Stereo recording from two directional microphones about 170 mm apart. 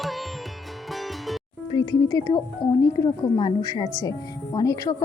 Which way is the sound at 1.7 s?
20° left (ahead or behind).